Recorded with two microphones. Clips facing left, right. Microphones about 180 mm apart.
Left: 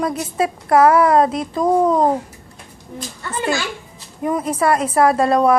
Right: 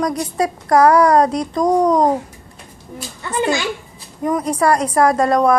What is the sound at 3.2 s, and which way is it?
Speech, 20° right (ahead or behind).